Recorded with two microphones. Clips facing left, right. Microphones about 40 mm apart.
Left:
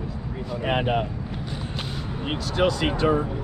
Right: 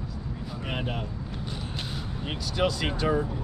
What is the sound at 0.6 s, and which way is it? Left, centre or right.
Speech, left.